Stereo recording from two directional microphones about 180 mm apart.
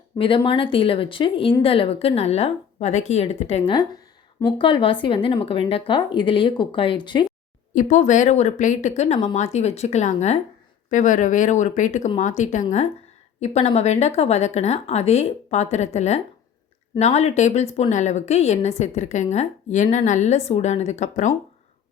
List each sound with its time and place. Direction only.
0.2 s speech: 30° left (ahead or behind)
7.7 s speech: 45° left (ahead or behind)